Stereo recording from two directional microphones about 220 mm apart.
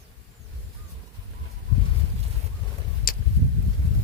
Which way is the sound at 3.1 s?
40° left (ahead or behind).